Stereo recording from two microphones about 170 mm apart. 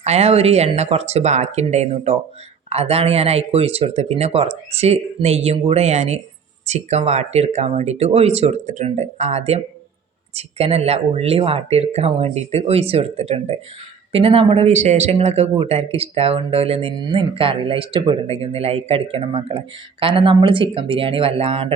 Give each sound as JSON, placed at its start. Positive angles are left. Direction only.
{"t": 0.0, "sound": "speech", "side_deg": -40}